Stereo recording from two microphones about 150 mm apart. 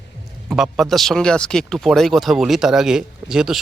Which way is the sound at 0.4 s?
5° right (ahead or behind).